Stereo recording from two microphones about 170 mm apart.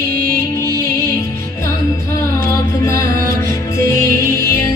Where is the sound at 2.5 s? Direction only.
20° left (ahead or behind).